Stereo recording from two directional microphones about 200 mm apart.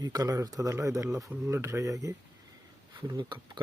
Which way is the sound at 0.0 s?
20° right (ahead or behind).